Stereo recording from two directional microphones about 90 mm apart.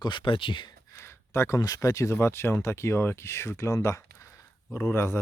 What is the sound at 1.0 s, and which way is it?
Speech, 30° left (ahead or behind).